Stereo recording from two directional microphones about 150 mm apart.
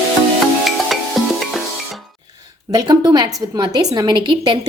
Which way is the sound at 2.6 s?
25° right (ahead or behind).